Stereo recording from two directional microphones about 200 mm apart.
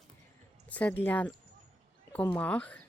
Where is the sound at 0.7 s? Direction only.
5° left (ahead or behind).